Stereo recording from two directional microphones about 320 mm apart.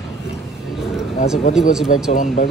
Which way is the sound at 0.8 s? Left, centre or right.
Centre.